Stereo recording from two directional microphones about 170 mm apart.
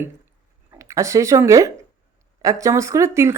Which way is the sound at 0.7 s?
20° right (ahead or behind).